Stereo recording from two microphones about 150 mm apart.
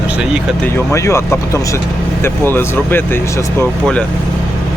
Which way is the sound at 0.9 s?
20° left (ahead or behind).